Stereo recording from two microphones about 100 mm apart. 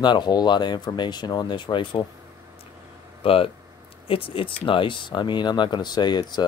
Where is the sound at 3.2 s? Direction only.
70° left (ahead or behind).